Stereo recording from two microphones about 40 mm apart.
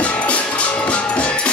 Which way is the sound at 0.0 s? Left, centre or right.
Left.